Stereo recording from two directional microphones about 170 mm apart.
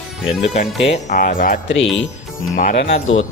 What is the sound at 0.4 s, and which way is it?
Speech, 40° left (ahead or behind).